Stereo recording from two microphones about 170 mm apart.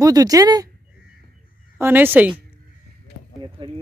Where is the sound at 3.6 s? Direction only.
30° right (ahead or behind).